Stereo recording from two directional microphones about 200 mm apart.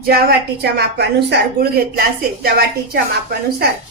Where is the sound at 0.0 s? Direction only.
50° right (ahead or behind).